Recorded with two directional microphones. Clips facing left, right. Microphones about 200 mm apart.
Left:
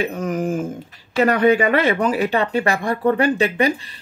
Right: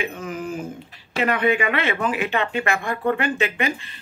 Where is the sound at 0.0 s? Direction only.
40° left (ahead or behind).